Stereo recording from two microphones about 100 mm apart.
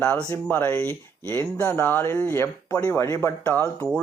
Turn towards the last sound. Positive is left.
turn(degrees=-20)  # may be behind; listen again after turning